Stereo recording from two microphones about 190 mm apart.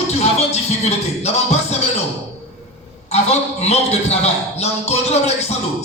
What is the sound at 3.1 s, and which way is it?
A man's voice, 35° left (ahead or behind).